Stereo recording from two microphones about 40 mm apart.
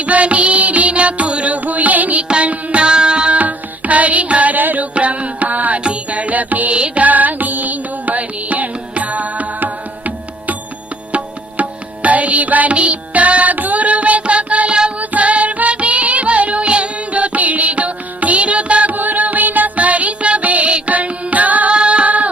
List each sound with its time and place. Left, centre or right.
0.0 s music: right
2.8 s music: right
3.3 s music: right
4.9 s music: right
11.1 s music: right
18.9 s music: right
21.8 s music: right